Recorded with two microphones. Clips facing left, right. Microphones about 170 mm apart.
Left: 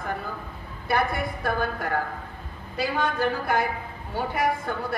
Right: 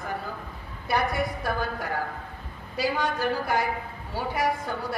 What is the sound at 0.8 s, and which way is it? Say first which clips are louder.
Speech: left 1 dB; 55° left (ahead or behind).